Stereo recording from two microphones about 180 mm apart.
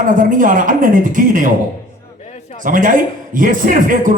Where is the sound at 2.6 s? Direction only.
50° right (ahead or behind).